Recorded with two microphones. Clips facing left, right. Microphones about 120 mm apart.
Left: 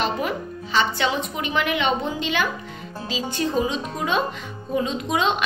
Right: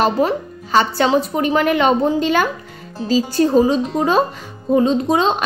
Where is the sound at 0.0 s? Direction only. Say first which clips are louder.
Right 8 dB; 35° right (ahead or behind).